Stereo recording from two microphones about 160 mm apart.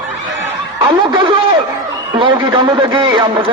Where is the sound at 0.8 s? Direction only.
30° right (ahead or behind).